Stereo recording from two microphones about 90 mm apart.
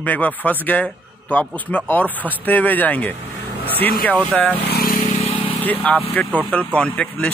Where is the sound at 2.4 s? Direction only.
20° left (ahead or behind).